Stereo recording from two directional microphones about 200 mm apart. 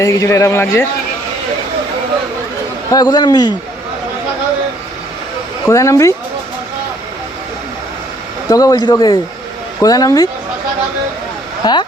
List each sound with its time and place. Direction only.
0.0 s speech: 15° left (ahead or behind)
2.9 s speech: 20° left (ahead or behind)
5.6 s speech: 15° left (ahead or behind)
8.4 s speech: 20° left (ahead or behind)
11.6 s speech: 20° left (ahead or behind)